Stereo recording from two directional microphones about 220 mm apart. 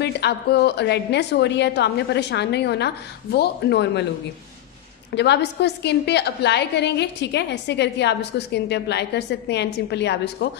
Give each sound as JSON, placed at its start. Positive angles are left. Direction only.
{"t": 0.0, "sound": "a woman's voice", "side_deg": 50}
{"t": 5.1, "sound": "a woman's voice", "side_deg": 50}